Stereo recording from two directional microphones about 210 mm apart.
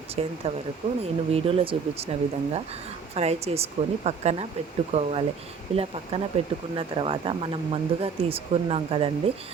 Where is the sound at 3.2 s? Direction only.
30° right (ahead or behind).